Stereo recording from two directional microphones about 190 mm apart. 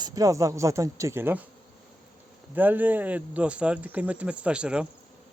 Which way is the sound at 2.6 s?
10° right (ahead or behind).